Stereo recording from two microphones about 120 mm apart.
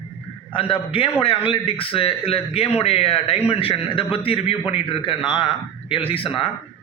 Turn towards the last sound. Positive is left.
turn(degrees=50)  # may be behind; listen again after turning